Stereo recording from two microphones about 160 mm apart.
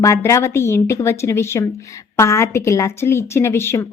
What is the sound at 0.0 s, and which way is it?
Speech, 20° left (ahead or behind).